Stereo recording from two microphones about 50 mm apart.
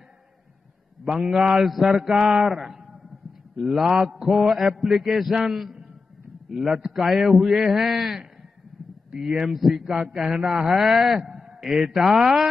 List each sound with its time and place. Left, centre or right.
1.4 s mantra: centre
3.7 s a man's voice: centre
4.0 s mantra: centre
4.3 s a man's voice: centre
9.4 s a man's voice: centre